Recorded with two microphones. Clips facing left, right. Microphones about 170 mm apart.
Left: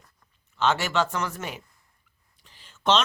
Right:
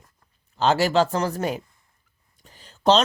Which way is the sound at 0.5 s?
35° right (ahead or behind).